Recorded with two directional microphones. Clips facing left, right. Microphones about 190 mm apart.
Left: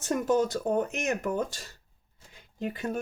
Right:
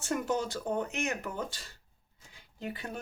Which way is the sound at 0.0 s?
45° left (ahead or behind).